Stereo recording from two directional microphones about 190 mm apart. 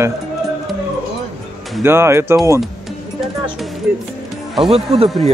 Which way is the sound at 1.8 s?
15° right (ahead or behind).